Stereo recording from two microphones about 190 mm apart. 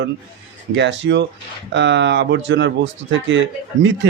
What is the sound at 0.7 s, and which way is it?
Speech, 75° right (ahead or behind).